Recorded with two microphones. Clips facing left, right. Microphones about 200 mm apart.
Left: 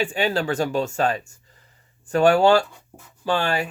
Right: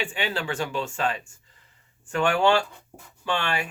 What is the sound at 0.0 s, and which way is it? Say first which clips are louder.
Speech: left 7 dB; 40° left (ahead or behind).